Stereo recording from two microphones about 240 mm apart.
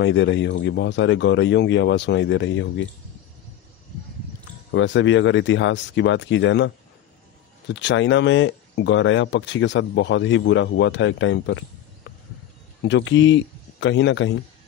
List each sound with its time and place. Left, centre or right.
0.0 s speech: left
4.6 s speech: left
12.8 s speech: left